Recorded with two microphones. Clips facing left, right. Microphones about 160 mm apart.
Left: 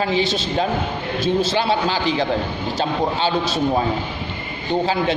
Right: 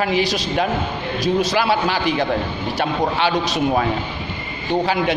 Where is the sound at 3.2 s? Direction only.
30° left (ahead or behind).